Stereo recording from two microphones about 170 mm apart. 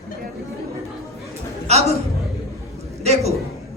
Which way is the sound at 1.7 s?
40° right (ahead or behind).